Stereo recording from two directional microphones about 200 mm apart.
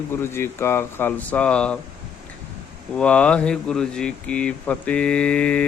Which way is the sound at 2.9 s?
5° left (ahead or behind).